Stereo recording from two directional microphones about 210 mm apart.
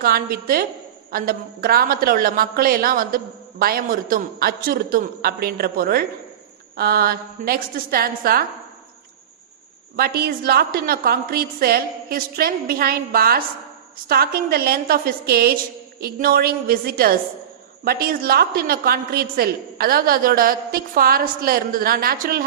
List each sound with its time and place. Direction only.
0.0 s a woman's voice: 45° right (ahead or behind)
9.9 s a woman's voice: 45° right (ahead or behind)